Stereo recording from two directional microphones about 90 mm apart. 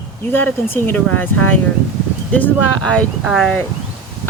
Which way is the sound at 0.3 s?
20° left (ahead or behind).